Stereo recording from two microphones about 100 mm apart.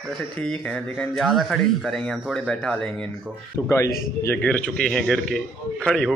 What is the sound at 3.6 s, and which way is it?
Speech, 30° left (ahead or behind).